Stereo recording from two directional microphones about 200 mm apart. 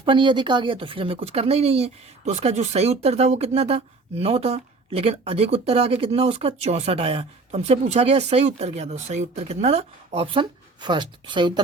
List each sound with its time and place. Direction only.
0.0 s speech: 25° right (ahead or behind)